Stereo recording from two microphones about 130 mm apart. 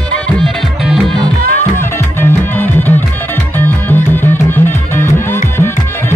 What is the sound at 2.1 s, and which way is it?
Music, 15° left (ahead or behind).